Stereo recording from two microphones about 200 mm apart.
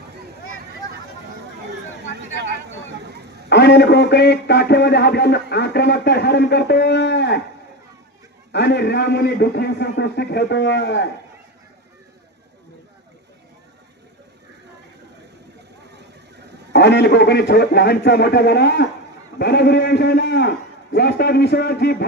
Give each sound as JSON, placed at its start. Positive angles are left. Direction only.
{"t": 3.4, "sound": "a man's voice", "side_deg": 60}
{"t": 8.5, "sound": "a man's voice", "side_deg": 55}
{"t": 16.7, "sound": "a man's voice", "side_deg": 60}